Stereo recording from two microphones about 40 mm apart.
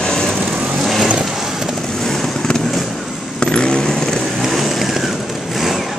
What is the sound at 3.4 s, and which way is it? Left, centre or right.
Vehicle, left.